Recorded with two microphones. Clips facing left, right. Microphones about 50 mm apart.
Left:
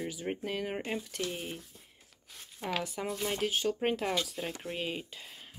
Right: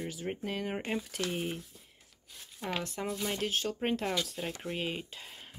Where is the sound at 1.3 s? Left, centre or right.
Centre.